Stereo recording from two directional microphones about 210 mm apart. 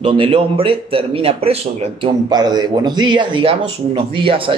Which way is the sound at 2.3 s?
20° right (ahead or behind).